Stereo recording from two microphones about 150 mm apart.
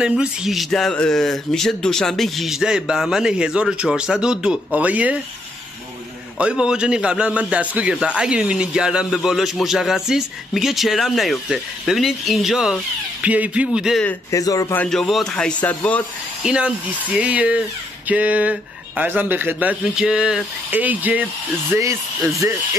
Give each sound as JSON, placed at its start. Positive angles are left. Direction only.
{"t": 0.0, "sound": "a man's voice", "side_deg": -5}
{"t": 6.3, "sound": "a man's voice", "side_deg": -5}
{"t": 14.3, "sound": "speech", "side_deg": 20}
{"t": 14.8, "sound": "a man's voice", "side_deg": 5}
{"t": 16.4, "sound": "speech", "side_deg": -5}